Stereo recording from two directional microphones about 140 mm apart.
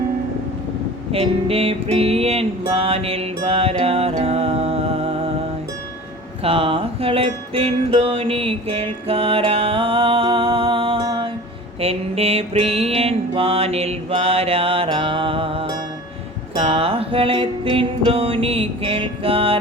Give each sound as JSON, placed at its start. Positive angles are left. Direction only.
{"t": 1.1, "sound": "music", "side_deg": -45}
{"t": 6.4, "sound": "music", "side_deg": -40}
{"t": 11.8, "sound": "music", "side_deg": -45}